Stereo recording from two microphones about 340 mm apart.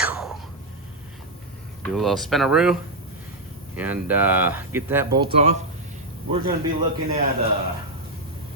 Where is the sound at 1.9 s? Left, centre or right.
Centre.